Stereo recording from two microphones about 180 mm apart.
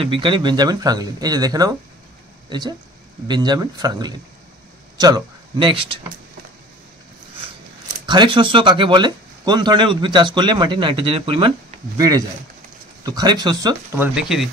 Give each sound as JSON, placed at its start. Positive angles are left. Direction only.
{"t": 0.0, "sound": "speech", "side_deg": -30}
{"t": 8.1, "sound": "speech", "side_deg": -25}
{"t": 13.0, "sound": "speech", "side_deg": -20}
{"t": 14.1, "sound": "speech", "side_deg": -5}